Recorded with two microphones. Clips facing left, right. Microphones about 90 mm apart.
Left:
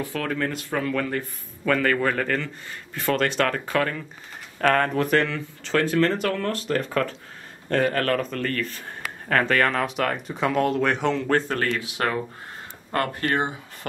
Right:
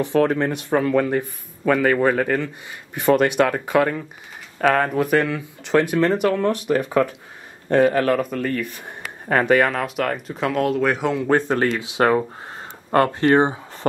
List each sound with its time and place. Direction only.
0.0 s speech: 25° right (ahead or behind)